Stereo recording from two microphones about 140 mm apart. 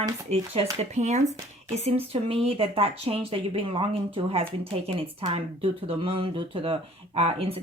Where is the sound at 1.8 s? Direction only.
45° right (ahead or behind).